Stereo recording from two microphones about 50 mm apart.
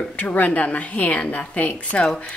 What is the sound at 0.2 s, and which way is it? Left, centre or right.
A woman's voice, left.